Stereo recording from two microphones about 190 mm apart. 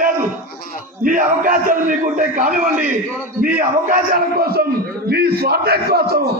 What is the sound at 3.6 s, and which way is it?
A man's voice, 50° right (ahead or behind).